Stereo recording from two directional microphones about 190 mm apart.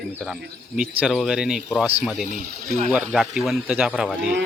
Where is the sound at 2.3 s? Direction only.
40° right (ahead or behind).